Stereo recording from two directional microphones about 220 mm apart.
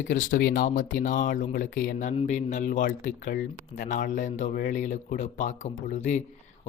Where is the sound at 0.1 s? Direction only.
45° left (ahead or behind).